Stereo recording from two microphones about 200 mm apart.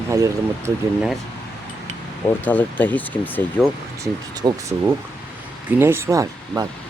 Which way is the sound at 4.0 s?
15° right (ahead or behind).